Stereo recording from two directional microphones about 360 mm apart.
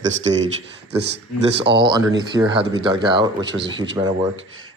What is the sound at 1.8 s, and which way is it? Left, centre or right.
A man's voice, centre.